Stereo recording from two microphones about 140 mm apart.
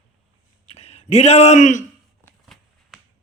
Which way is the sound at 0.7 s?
50° left (ahead or behind).